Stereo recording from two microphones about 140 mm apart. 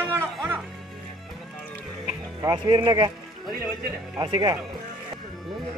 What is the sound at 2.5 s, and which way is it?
Speech, 30° right (ahead or behind).